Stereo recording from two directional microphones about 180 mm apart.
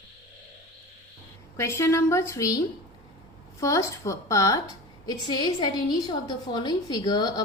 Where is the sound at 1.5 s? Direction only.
15° left (ahead or behind).